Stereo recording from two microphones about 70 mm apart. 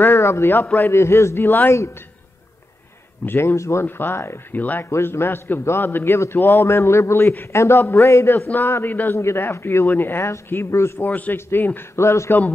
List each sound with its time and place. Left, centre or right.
0.1 s a man's voice: left
3.3 s a man's voice: left
3.8 s a man's voice: left
4.6 s speech: left
4.8 s a man's voice: left
11.1 s a man's voice: left